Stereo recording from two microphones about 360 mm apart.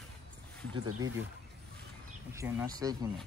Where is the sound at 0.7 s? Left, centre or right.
Right.